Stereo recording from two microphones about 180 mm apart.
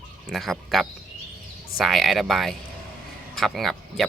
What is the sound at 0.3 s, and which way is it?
Speech, centre (ahead or behind).